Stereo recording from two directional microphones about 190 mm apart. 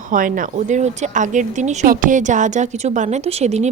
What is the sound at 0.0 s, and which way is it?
Speech, 45° right (ahead or behind).